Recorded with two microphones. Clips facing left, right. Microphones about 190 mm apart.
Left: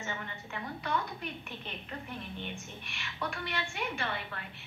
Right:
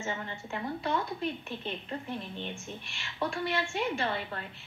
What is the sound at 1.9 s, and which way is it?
A woman's voice, 25° right (ahead or behind).